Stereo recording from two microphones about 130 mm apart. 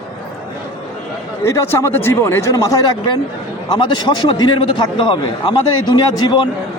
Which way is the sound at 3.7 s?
35° left (ahead or behind).